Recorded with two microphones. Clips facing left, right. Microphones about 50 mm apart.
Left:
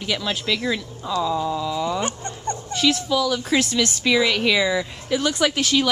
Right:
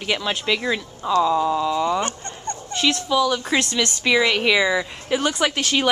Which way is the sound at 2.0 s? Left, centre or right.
Centre.